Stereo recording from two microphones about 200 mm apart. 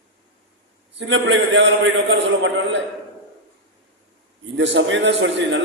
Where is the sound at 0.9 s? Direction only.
65° right (ahead or behind).